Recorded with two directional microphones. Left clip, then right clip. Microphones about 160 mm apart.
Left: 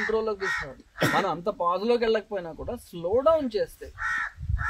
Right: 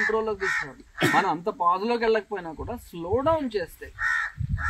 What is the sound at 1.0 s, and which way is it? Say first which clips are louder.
Speech: right 2 dB; 90° left.